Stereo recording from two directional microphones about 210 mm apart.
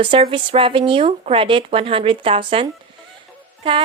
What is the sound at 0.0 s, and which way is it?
A woman's voice, 25° right (ahead or behind).